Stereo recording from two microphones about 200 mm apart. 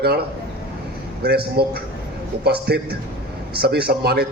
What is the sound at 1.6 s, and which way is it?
A man's voice, 55° right (ahead or behind).